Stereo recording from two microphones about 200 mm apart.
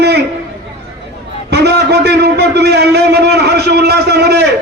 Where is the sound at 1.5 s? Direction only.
55° right (ahead or behind).